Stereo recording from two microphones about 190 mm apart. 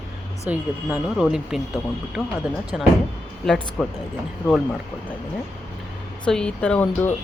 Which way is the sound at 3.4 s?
Centre (ahead or behind).